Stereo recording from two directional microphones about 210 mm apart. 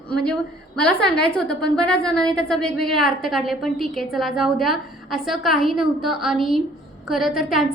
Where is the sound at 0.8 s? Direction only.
5° left (ahead or behind).